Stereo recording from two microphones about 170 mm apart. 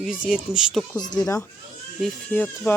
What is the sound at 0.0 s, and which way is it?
Speech, 5° right (ahead or behind).